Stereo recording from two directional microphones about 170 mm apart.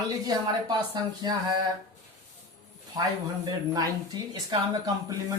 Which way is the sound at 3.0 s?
20° right (ahead or behind).